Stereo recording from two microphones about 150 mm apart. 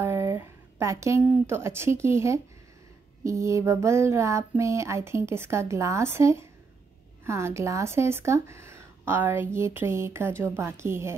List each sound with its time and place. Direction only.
0.0 s a woman's voice: 20° right (ahead or behind)
3.3 s a sound: 20° right (ahead or behind)
7.2 s a woman's voice: 20° right (ahead or behind)